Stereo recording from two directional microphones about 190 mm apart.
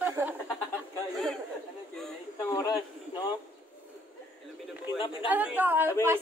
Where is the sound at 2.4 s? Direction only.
15° left (ahead or behind).